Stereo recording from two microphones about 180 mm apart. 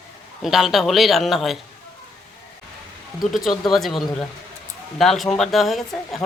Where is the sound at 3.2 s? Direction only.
Centre (ahead or behind).